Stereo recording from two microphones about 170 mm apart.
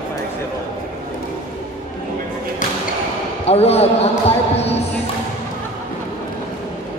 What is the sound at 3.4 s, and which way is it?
Speech, 35° left (ahead or behind).